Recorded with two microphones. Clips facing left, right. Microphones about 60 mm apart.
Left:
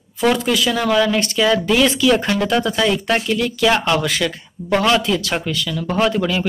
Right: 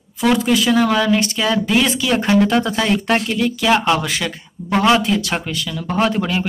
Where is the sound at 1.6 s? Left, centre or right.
Centre.